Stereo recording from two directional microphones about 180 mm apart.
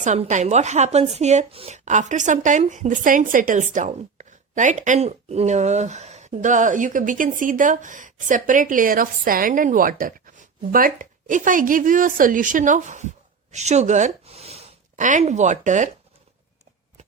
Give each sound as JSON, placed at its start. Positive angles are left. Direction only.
{"t": 0.0, "sound": "speech", "side_deg": -40}